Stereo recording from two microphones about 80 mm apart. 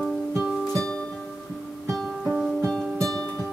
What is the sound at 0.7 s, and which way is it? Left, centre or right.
Music, centre.